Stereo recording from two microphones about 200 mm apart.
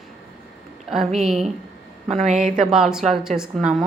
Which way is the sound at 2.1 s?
35° right (ahead or behind).